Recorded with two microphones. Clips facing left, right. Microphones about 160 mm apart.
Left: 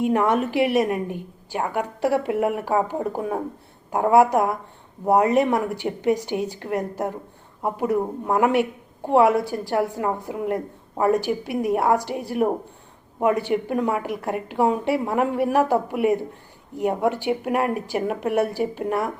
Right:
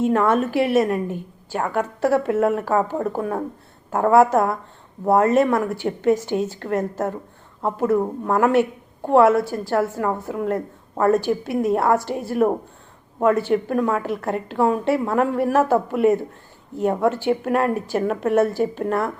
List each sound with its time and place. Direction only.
0.0 s a woman's voice: 15° left (ahead or behind)